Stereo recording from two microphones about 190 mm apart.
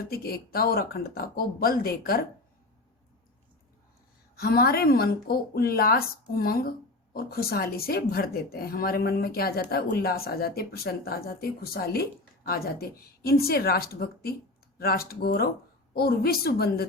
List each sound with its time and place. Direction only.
0.1 s a woman's voice: 55° left (ahead or behind)
4.4 s a woman's voice: 55° left (ahead or behind)